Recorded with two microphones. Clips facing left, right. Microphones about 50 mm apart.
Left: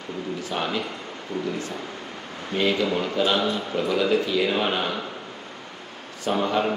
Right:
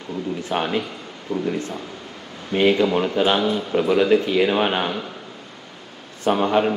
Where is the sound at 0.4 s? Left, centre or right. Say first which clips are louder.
Right 4 dB; right.